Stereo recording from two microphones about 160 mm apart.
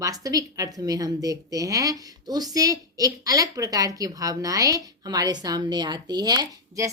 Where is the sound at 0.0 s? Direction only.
20° right (ahead or behind).